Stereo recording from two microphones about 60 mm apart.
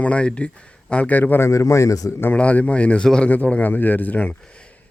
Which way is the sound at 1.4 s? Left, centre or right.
Left.